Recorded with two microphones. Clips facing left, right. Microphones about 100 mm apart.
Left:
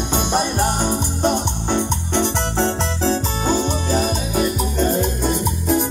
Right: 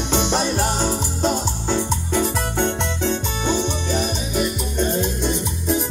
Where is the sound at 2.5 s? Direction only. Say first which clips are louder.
Left 2 dB; 30° left (ahead or behind).